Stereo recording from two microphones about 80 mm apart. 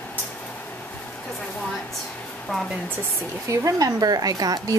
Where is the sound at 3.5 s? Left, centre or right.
Right.